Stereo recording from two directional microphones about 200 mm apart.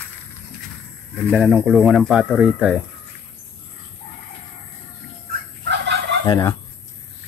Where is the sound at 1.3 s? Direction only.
10° right (ahead or behind).